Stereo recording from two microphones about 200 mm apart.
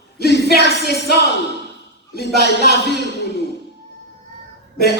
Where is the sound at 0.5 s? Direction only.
55° left (ahead or behind).